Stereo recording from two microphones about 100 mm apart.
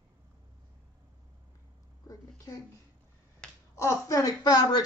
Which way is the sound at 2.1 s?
35° left (ahead or behind).